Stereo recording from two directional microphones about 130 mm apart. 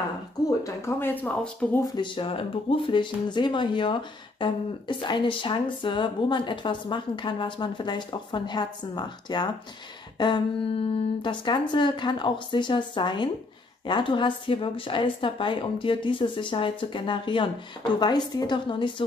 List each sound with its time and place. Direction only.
0.5 s speech: 20° left (ahead or behind)
1.9 s speech: 40° left (ahead or behind)